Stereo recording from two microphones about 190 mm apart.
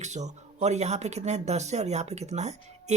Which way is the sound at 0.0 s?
35° right (ahead or behind).